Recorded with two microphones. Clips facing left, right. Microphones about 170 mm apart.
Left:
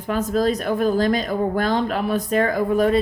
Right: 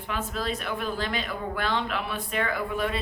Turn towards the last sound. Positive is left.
turn(degrees=40)  # may be behind; listen again after turning